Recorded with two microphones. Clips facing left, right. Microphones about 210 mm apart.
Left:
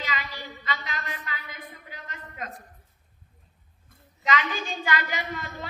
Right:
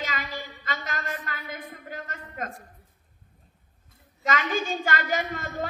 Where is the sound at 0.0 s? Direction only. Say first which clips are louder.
Right 1 dB; 45° right (ahead or behind).